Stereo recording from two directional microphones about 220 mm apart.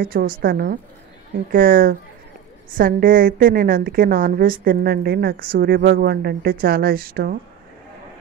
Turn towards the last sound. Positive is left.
turn(degrees=-40)  # may be behind; listen again after turning